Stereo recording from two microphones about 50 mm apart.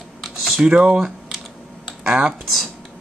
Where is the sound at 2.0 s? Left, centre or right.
Centre.